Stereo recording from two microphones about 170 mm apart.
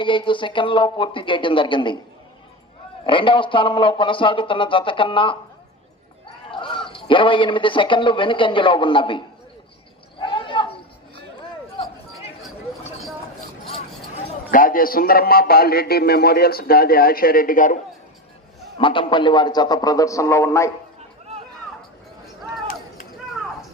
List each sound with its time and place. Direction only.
0.0 s speech: 30° left (ahead or behind)
3.1 s speech: 30° left (ahead or behind)
6.5 s a man's voice: 30° left (ahead or behind)
10.2 s a sound: 30° left (ahead or behind)
14.5 s a man's voice: 55° left (ahead or behind)
18.8 s speech: 30° left (ahead or behind)